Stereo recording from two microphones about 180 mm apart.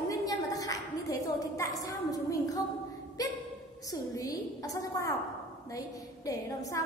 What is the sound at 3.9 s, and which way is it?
A woman's voice, 20° left (ahead or behind).